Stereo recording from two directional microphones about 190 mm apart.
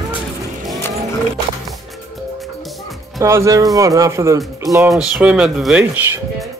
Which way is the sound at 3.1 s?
15° right (ahead or behind).